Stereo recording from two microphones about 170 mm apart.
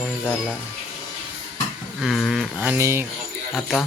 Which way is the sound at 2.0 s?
Centre (ahead or behind).